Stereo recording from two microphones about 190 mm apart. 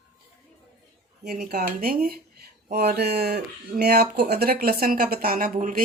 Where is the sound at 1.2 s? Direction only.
55° right (ahead or behind).